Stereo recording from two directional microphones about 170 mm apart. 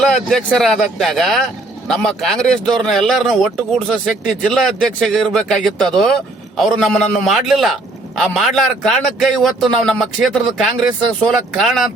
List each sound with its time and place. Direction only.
0.0 s speech: 5° left (ahead or behind)